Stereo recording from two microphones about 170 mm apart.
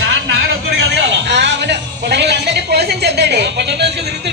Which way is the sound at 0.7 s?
85° right.